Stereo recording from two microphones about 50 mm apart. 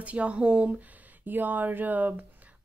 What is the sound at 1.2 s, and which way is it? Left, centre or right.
Speech, right.